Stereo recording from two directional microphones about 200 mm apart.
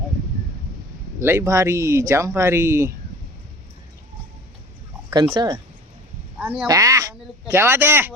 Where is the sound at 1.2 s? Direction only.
15° right (ahead or behind).